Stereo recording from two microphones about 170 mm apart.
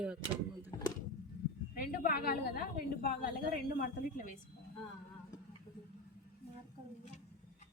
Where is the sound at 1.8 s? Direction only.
65° left (ahead or behind).